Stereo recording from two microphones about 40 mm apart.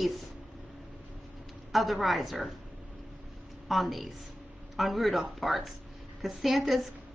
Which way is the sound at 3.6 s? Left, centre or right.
Centre.